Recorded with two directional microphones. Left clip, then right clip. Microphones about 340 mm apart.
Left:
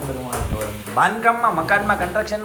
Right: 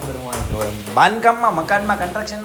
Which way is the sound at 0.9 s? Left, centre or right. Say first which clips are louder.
Right 3 dB; centre.